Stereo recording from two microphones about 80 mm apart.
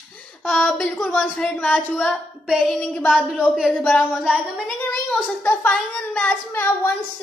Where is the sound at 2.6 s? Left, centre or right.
Centre.